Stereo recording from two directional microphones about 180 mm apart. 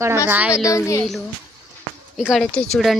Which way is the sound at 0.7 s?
15° left (ahead or behind).